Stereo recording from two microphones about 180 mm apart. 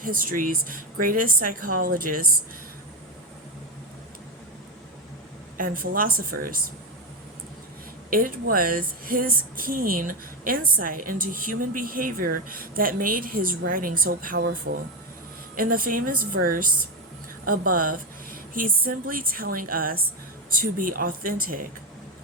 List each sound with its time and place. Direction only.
0.0 s a woman's voice: 50° right (ahead or behind)
5.5 s a woman's voice: 50° right (ahead or behind)
8.1 s a woman's voice: 50° right (ahead or behind)